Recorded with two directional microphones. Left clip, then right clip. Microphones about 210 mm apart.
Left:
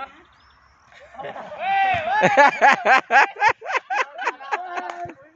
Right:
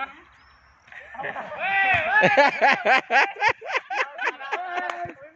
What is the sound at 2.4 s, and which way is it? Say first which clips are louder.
Speech: left 4 dB; 10° left (ahead or behind).